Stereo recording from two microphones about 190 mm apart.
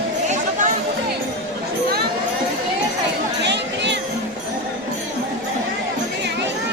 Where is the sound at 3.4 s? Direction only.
65° right (ahead or behind).